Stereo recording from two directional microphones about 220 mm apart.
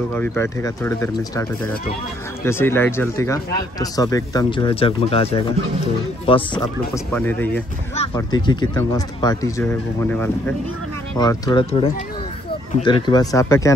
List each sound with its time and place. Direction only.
0.1 s speech: 10° left (ahead or behind)
2.4 s speech: 10° left (ahead or behind)
7.1 s speech: 5° left (ahead or behind)
7.9 s speech: 25° left (ahead or behind)